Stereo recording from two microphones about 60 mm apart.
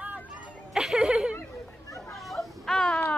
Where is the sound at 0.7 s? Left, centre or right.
Centre.